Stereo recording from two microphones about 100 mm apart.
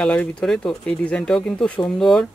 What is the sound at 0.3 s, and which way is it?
Speech, 10° left (ahead or behind).